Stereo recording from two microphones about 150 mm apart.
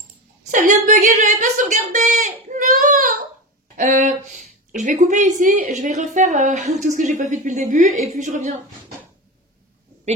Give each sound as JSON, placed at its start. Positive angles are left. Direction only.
{"t": 0.5, "sound": "a woman's voice", "side_deg": -60}
{"t": 3.7, "sound": "a woman's voice", "side_deg": -55}